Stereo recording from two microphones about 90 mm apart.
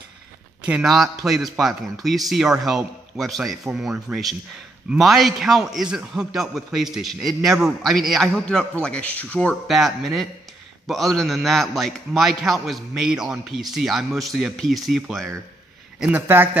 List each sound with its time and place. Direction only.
0.8 s a man's voice: centre (ahead or behind); by 9.6 s 15° left (ahead or behind)
9.7 s a man's voice: centre (ahead or behind)
16.1 s speech: 25° right (ahead or behind)